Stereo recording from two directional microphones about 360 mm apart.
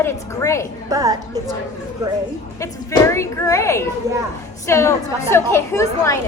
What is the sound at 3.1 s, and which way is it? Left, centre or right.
A woman's voice, centre.